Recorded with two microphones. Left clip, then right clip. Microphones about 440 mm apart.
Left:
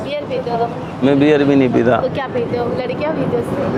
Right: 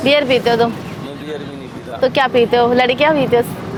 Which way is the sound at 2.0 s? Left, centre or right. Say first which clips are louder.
Right 6 dB; right.